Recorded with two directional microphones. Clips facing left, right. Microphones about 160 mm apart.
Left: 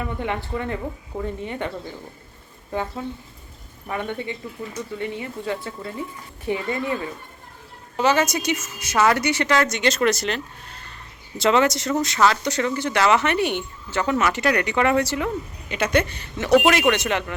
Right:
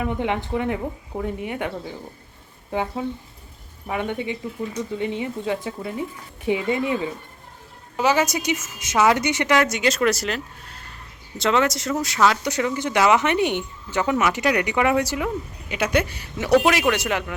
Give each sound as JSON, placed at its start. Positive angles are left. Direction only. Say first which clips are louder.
{"t": 0.0, "sound": "speech", "louder": "right 3 dB", "side_deg": -15}
{"t": 3.8, "sound": "speech", "louder": "right 2 dB", "side_deg": -15}